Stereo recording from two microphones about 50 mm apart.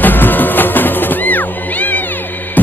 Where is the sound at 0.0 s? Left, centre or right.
Left.